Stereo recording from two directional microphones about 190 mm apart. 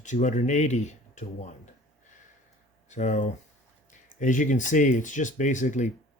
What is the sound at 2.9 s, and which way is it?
Speech, 40° left (ahead or behind).